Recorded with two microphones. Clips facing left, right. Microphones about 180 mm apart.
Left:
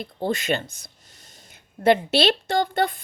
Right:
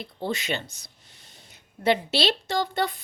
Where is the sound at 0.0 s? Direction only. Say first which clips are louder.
Left 4 dB; 50° left (ahead or behind).